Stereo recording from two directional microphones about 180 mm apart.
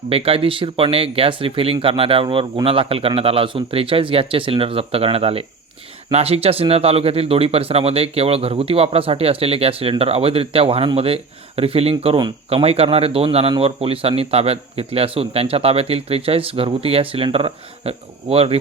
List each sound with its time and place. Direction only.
0.1 s speech: 30° right (ahead or behind)